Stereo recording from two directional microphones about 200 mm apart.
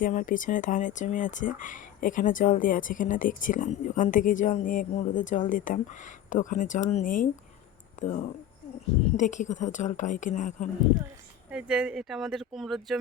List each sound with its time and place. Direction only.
0.0 s speech: 40° left (ahead or behind)
9.1 s speech: 40° left (ahead or behind)
11.5 s speech: 5° right (ahead or behind)